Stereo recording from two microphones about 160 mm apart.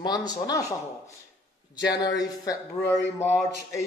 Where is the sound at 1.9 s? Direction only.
25° left (ahead or behind).